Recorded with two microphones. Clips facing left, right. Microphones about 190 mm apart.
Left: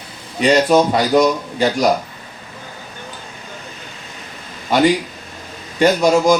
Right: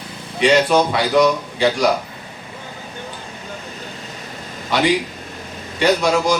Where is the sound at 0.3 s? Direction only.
40° left (ahead or behind).